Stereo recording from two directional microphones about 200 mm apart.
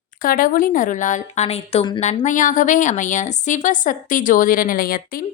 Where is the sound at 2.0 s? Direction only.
35° left (ahead or behind).